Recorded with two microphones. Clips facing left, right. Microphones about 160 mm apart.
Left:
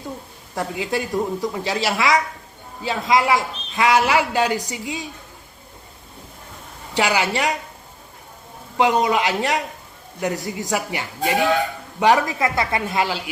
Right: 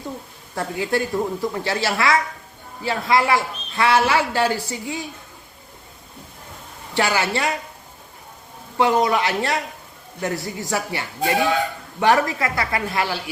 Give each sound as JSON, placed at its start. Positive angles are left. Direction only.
{"t": 0.5, "sound": "a man's voice", "side_deg": 15}
{"t": 6.9, "sound": "a man's voice", "side_deg": 15}
{"t": 8.8, "sound": "a man's voice", "side_deg": 15}